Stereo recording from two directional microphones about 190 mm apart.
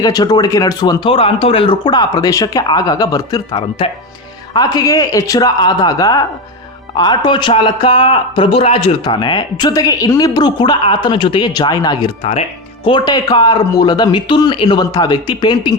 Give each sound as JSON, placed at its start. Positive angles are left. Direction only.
{"t": 0.0, "sound": "speech", "side_deg": 20}